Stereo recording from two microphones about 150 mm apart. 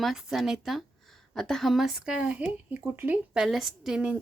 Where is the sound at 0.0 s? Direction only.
Centre (ahead or behind).